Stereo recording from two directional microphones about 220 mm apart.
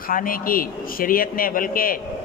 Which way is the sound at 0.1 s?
40° left (ahead or behind).